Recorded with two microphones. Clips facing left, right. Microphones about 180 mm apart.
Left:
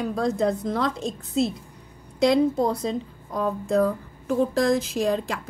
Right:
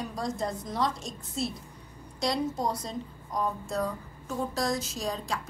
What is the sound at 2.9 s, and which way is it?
Speech, 90° left.